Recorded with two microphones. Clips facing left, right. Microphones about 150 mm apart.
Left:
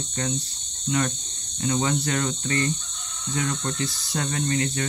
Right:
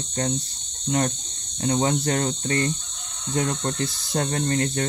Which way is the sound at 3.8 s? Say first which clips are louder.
Right 3 dB; 50° right (ahead or behind).